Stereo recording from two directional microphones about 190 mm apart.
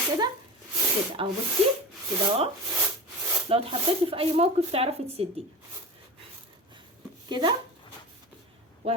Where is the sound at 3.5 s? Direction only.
30° right (ahead or behind).